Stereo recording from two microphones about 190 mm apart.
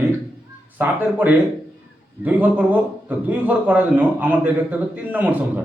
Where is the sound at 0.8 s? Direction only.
10° right (ahead or behind).